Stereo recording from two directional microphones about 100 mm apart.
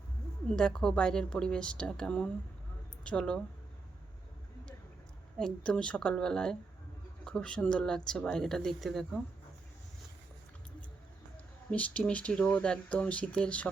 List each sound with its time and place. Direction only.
0.4 s speech: 5° left (ahead or behind)
5.4 s speech: 10° left (ahead or behind)
11.7 s speech: 15° left (ahead or behind)